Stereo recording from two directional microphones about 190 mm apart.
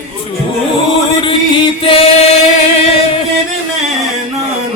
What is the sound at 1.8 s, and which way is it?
Chant, 30° left (ahead or behind).